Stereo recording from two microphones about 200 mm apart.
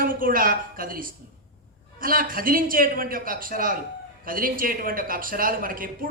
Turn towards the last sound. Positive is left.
turn(degrees=-45)  # may be behind; listen again after turning